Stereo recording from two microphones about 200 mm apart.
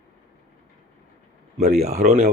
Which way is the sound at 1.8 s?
35° right (ahead or behind).